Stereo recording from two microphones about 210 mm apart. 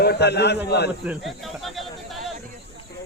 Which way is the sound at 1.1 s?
Centre (ahead or behind).